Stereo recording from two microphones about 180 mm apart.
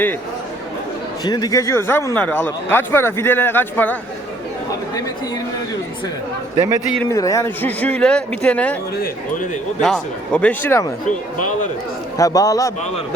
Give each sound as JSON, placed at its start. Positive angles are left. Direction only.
{"t": 1.2, "sound": "a man's voice", "side_deg": 20}
{"t": 7.1, "sound": "a man's voice", "side_deg": 20}
{"t": 9.0, "sound": "a man's voice", "side_deg": 45}
{"t": 9.8, "sound": "a man's voice", "side_deg": 5}
{"t": 11.0, "sound": "a man's voice", "side_deg": 45}
{"t": 12.1, "sound": "a man's voice", "side_deg": 20}